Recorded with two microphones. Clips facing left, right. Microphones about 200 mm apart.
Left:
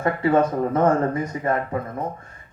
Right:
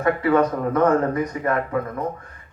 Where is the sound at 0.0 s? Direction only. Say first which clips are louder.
Right 1 dB; 25° left (ahead or behind).